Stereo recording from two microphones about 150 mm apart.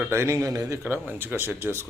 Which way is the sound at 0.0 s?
15° right (ahead or behind).